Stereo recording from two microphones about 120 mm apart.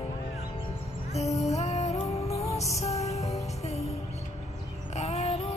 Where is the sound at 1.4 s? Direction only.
65° left (ahead or behind).